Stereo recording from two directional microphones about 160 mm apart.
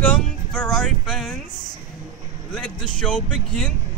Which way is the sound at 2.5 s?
5° left (ahead or behind).